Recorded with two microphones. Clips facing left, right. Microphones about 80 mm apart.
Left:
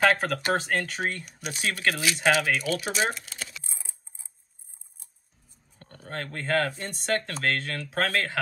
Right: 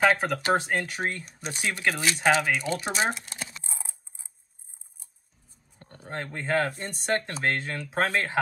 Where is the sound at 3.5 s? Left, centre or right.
Right.